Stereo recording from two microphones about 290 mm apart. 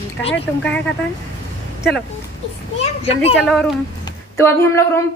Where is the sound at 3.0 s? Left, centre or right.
Left.